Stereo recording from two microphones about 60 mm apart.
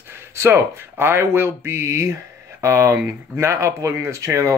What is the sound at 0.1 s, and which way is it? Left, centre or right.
Speech, right.